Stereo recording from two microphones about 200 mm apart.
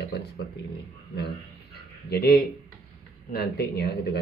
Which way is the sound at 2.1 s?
50° left (ahead or behind).